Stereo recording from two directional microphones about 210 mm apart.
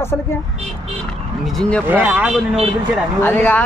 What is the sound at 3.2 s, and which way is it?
Speech, 10° left (ahead or behind).